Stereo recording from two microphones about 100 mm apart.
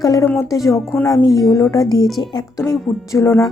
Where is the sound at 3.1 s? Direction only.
30° left (ahead or behind).